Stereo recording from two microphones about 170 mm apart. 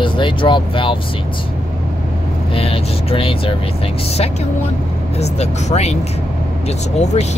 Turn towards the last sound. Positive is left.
turn(degrees=40)  # may be behind; listen again after turning